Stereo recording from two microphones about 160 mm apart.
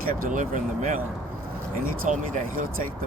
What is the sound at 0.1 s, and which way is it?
Speech, 60° right (ahead or behind).